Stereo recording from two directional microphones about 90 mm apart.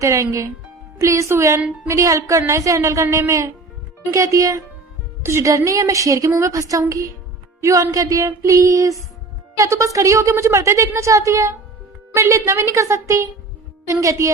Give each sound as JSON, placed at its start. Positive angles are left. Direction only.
{"t": 0.0, "sound": "a woman's voice", "side_deg": -35}